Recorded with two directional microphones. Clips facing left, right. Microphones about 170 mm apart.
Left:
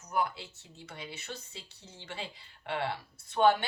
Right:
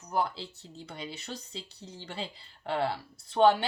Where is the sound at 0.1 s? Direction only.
30° right (ahead or behind).